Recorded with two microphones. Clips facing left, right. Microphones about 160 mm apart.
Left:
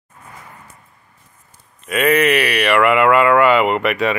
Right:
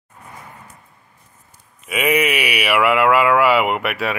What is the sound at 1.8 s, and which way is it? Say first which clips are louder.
Speech: left 3 dB; 10° right (ahead or behind).